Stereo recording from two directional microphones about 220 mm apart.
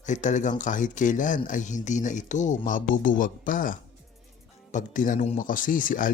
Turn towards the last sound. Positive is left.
turn(degrees=40)  # may be behind; listen again after turning